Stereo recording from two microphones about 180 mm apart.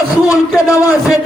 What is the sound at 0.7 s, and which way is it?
Speech, 15° left (ahead or behind).